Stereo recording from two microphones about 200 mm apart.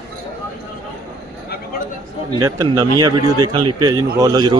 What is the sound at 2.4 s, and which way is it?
A man's voice, 15° right (ahead or behind).